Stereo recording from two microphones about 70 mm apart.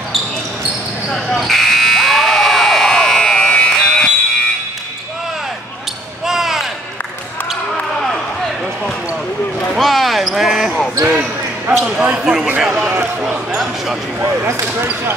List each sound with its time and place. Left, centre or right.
1.1 s buzzer: centre
6.2 s basketball bounce: centre
9.8 s basketball bounce: centre
11.1 s basketball bounce: right
12.6 s a sound: centre
14.4 s basketball bounce: right